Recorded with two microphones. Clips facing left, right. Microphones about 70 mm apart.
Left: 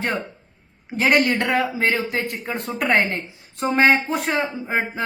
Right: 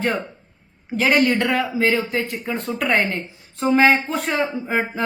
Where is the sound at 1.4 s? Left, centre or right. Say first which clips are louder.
Right 1 dB; left.